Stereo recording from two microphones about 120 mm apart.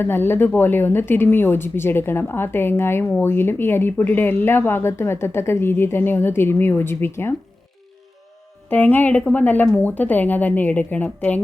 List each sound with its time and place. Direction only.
0.0 s speech: 20° left (ahead or behind)
8.7 s a woman's voice: 15° left (ahead or behind)